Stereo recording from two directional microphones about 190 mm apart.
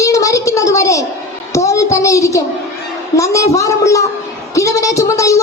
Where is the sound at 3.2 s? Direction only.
15° left (ahead or behind).